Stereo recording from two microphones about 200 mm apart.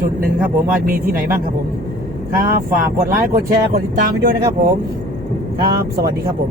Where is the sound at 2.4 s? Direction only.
40° right (ahead or behind).